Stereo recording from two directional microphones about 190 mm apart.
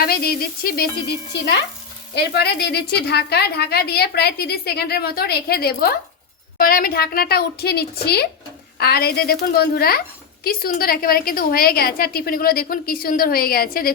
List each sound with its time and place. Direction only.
0.0 s a woman's voice: 55° left (ahead or behind)
2.1 s a woman's voice: 60° left (ahead or behind)